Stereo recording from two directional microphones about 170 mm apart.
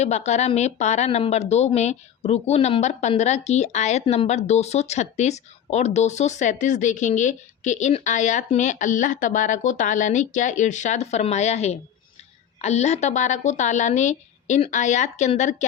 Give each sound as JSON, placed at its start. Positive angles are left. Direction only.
{"t": 0.0, "sound": "a woman's voice", "side_deg": 40}